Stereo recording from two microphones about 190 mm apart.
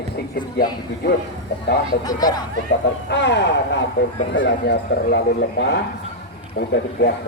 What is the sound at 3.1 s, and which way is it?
Speech, 65° left (ahead or behind).